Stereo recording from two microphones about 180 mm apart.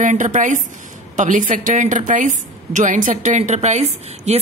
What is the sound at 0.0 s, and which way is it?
Speech, 45° right (ahead or behind).